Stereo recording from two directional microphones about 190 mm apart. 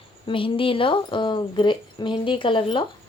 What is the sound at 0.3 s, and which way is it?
A woman's voice, 25° left (ahead or behind).